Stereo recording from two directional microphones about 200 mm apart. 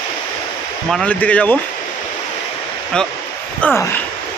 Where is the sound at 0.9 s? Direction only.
5° left (ahead or behind).